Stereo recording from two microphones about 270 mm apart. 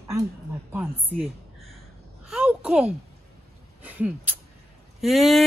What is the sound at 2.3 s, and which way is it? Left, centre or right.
A woman's voice, centre.